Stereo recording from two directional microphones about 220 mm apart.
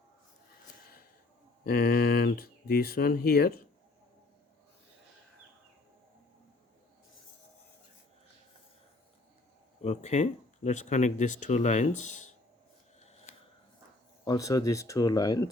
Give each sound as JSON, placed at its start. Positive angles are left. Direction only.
{"t": 1.6, "sound": "speech", "side_deg": 40}
{"t": 9.8, "sound": "speech", "side_deg": 30}
{"t": 14.3, "sound": "speech", "side_deg": 15}